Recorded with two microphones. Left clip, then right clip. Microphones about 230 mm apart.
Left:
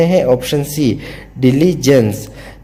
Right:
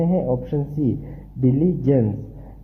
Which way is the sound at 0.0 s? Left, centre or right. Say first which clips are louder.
Left 11 dB; left.